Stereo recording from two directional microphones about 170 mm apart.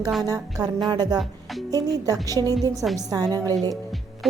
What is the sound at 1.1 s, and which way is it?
Music, centre (ahead or behind).